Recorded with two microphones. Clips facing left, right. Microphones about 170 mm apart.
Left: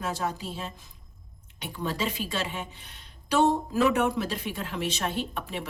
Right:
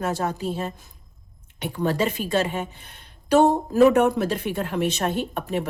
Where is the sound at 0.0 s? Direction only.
55° right (ahead or behind).